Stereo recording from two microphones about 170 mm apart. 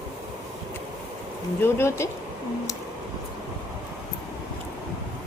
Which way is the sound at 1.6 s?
15° left (ahead or behind).